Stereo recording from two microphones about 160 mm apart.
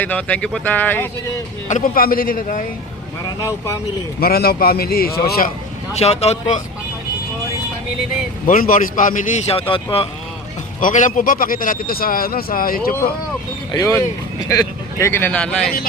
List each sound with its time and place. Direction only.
0.0 s speech: 10° left (ahead or behind)
1.6 s speech: 55° left (ahead or behind)
4.2 s a man's voice: 70° left (ahead or behind)
6.0 s speech: 40° left (ahead or behind)
8.4 s speech: 60° left (ahead or behind); by 10.1 s 35° left (ahead or behind)
10.8 s speech: 55° left (ahead or behind)
13.7 s speech: 20° left (ahead or behind)